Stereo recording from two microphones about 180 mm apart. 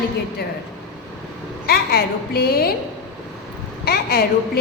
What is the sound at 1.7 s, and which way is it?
A woman's voice, 60° left (ahead or behind).